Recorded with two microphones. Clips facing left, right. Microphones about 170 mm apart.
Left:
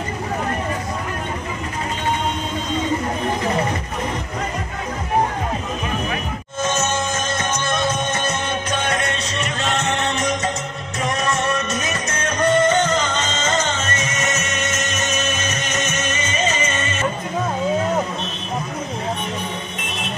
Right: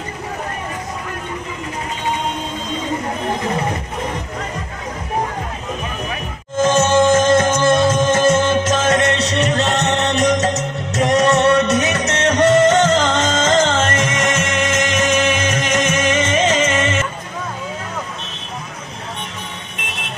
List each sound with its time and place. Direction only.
6.9 s music: 90° right